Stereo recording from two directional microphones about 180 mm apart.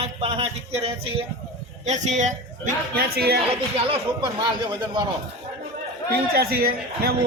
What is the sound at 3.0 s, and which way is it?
Speech, 60° right (ahead or behind).